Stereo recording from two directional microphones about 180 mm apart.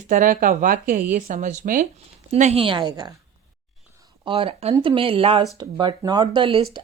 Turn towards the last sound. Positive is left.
turn(degrees=-30)  # may be behind; listen again after turning